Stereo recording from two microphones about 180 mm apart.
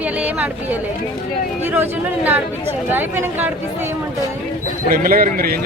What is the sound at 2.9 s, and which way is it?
Speech, 10° right (ahead or behind).